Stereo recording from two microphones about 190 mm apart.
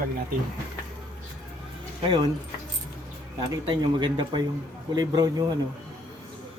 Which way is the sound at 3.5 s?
25° right (ahead or behind).